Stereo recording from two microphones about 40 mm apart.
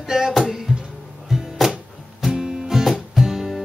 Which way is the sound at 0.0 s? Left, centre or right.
Centre.